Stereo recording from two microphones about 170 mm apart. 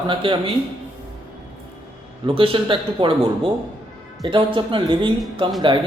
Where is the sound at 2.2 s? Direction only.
30° right (ahead or behind).